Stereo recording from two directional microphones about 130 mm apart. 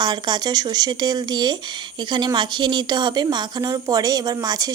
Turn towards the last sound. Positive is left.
turn(degrees=-30)  # may be behind; listen again after turning